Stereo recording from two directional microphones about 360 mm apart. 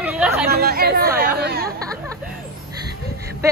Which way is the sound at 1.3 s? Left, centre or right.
Right.